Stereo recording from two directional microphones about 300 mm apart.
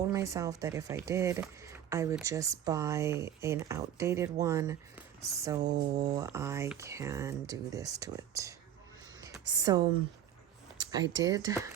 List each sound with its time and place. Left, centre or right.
0.1 s speech: centre
5.6 s speech: right
6.0 s speech: centre
10.8 s a sound: centre
11.2 s speech: centre